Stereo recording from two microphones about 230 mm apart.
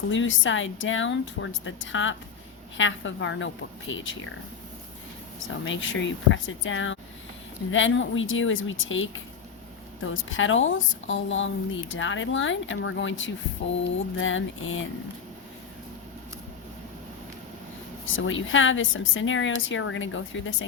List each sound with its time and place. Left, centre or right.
0.1 s a woman's voice: left
5.6 s a woman's voice: left
18.0 s a woman's voice: left